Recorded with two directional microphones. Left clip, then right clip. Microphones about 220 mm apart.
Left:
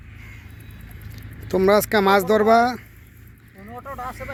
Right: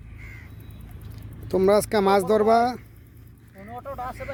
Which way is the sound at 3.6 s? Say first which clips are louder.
Left 1 dB; 45° right (ahead or behind).